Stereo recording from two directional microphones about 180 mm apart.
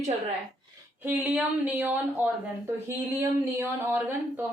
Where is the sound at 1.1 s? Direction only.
10° right (ahead or behind).